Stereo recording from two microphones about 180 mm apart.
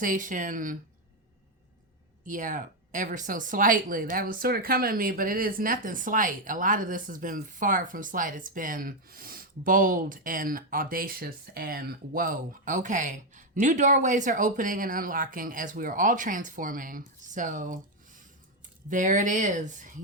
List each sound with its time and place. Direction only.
0.0 s speech: 45° right (ahead or behind)
2.2 s speech: 45° right (ahead or behind)